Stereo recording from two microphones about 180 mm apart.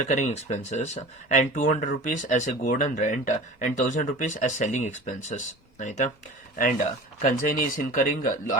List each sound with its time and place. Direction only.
0.1 s speech: 40° left (ahead or behind)
7.2 s speech: 50° left (ahead or behind)